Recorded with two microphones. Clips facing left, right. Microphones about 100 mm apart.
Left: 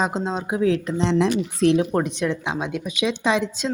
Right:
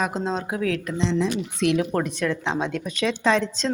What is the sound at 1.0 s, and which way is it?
Speech, 70° left (ahead or behind).